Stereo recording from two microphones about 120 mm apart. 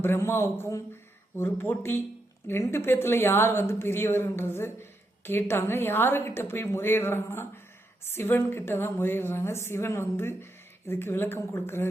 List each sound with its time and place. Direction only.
0.0 s speech: 20° left (ahead or behind)